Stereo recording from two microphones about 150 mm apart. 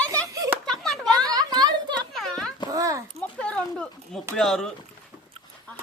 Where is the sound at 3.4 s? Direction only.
10° left (ahead or behind).